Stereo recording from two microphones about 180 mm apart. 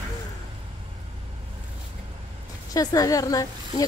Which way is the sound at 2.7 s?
20° left (ahead or behind).